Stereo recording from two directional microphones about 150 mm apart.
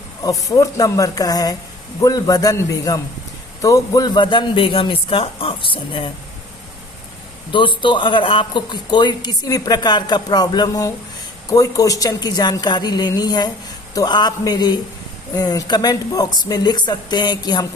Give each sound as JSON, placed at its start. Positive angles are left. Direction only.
{"t": 0.2, "sound": "a man's voice", "side_deg": 25}
{"t": 7.5, "sound": "a man's voice", "side_deg": 35}